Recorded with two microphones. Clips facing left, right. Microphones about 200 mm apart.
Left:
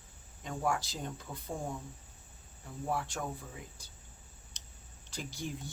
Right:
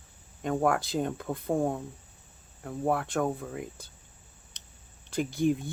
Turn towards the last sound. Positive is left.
turn(degrees=-55)  # may be behind; listen again after turning